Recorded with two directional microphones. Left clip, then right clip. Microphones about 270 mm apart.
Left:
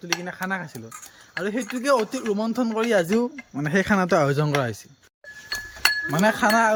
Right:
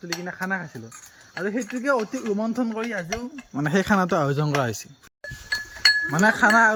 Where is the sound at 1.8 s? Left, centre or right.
Centre.